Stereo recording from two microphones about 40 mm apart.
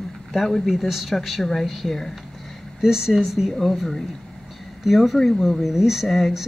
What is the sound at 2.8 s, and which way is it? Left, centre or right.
Speech, centre.